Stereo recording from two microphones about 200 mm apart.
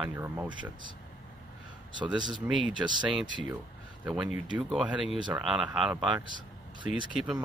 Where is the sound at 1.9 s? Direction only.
20° right (ahead or behind).